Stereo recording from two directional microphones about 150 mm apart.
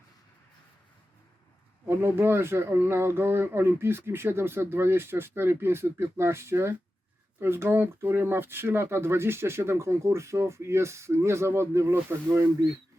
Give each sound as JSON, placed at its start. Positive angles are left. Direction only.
{"t": 1.9, "sound": "speech", "side_deg": -15}